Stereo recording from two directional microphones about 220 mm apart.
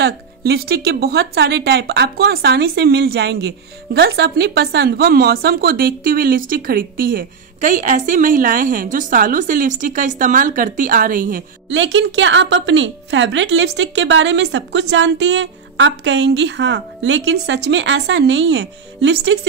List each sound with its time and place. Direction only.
0.0 s a woman's voice: 45° right (ahead or behind)
11.7 s a woman's voice: 55° right (ahead or behind)